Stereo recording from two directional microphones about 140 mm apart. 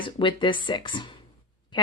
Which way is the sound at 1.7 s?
30° left (ahead or behind).